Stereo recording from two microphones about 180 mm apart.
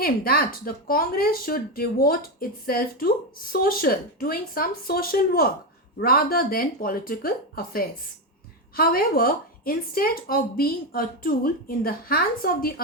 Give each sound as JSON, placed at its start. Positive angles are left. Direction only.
{"t": 0.0, "sound": "speech", "side_deg": 55}